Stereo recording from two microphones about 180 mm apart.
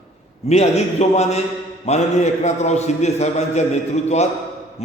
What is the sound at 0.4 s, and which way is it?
A man's voice, 35° left (ahead or behind).